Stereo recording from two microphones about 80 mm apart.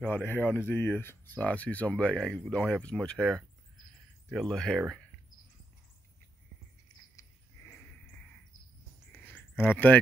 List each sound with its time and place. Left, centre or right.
0.0 s speech: left; by 5.0 s centre
9.1 s a sound: left
9.7 s speech: left